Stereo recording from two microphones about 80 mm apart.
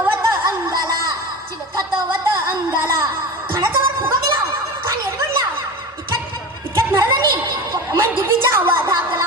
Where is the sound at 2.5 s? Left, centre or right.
Right.